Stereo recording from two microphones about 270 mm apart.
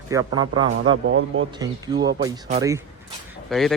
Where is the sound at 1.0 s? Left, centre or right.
Right.